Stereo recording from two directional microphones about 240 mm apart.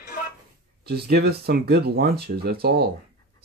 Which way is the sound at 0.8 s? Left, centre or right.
Right.